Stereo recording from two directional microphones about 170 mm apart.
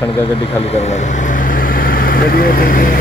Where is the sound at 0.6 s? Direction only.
40° left (ahead or behind).